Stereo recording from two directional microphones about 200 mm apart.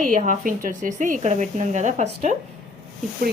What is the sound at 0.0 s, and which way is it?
Speech, 40° right (ahead or behind).